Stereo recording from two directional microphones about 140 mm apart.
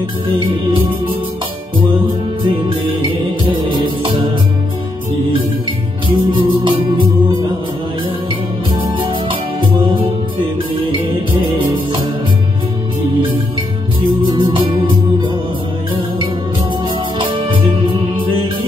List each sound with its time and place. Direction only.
0.4 s music: 40° right (ahead or behind)
3.4 s music: 35° right (ahead or behind)
6.0 s music: 35° right (ahead or behind)
11.5 s music: 35° right (ahead or behind)
14.2 s music: 35° right (ahead or behind)
17.2 s music: 35° right (ahead or behind)